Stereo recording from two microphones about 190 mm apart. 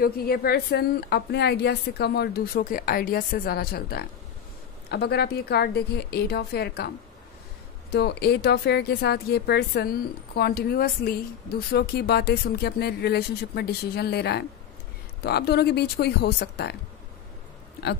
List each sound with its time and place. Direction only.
0.0 s a woman's voice: 50° left (ahead or behind)
7.9 s speech: 60° left (ahead or behind)